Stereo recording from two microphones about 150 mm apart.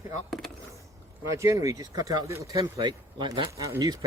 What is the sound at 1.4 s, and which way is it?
Speech, 20° right (ahead or behind).